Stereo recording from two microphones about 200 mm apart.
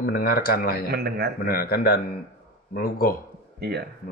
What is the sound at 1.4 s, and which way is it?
Speech, 50° left (ahead or behind).